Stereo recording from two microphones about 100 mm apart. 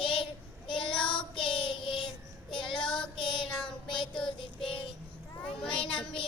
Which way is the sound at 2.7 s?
5° left (ahead or behind).